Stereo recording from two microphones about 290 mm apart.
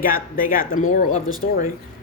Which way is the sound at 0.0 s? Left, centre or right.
Left.